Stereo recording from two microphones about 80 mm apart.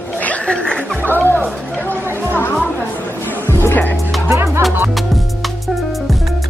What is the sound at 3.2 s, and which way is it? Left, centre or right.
Music, left.